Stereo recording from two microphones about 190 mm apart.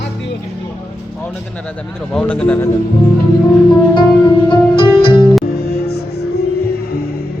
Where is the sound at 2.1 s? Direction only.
5° left (ahead or behind).